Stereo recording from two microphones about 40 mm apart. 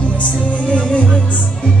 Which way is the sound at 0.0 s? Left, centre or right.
Left.